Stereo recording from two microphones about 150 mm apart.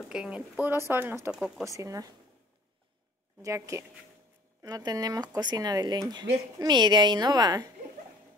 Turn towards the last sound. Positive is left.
turn(degrees=-25)  # may be behind; listen again after turning